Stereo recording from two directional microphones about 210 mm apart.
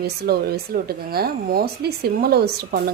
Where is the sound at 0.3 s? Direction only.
45° right (ahead or behind).